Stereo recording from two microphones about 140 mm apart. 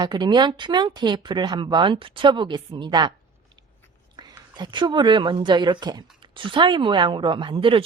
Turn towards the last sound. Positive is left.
turn(degrees=-40)  # may be behind; listen again after turning